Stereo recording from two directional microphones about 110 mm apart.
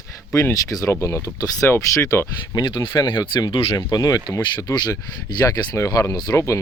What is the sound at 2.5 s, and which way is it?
Speech, 45° left (ahead or behind).